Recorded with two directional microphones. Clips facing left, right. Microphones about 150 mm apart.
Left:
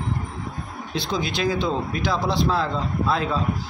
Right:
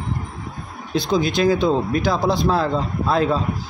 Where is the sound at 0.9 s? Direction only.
45° right (ahead or behind).